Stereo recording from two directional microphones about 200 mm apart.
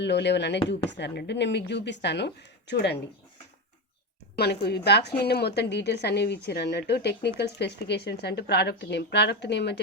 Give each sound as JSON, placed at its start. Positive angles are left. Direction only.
{"t": 0.0, "sound": "a woman's voice", "side_deg": 60}
{"t": 4.4, "sound": "a woman's voice", "side_deg": 55}